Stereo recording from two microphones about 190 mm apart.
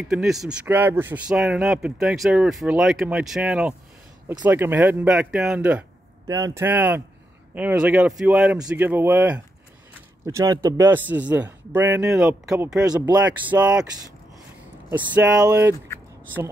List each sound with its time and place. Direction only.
0.1 s a man's voice: centre (ahead or behind)
6.2 s a man's voice: 20° right (ahead or behind)
12.9 s speech: 20° right (ahead or behind)
13.2 s a man's voice: 5° right (ahead or behind)
14.9 s a man's voice: 10° right (ahead or behind)